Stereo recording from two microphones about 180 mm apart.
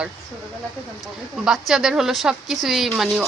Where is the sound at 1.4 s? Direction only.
Centre (ahead or behind).